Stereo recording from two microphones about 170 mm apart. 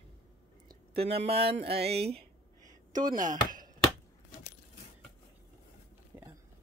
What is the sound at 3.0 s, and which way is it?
Speech, 50° right (ahead or behind).